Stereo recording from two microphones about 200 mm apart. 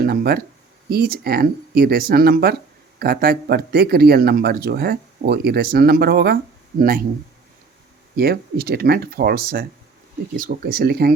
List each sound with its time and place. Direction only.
0.0 s a sound: 50° right (ahead or behind)
0.9 s speech: 50° right (ahead or behind)
8.1 s speech: 50° right (ahead or behind)